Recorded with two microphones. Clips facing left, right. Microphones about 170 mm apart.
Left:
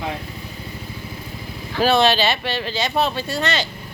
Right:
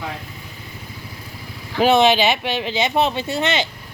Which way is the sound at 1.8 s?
20° right (ahead or behind).